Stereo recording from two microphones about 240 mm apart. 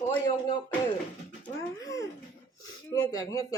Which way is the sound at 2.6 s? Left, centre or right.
Centre.